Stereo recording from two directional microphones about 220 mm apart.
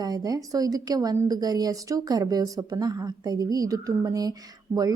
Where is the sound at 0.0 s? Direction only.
15° right (ahead or behind).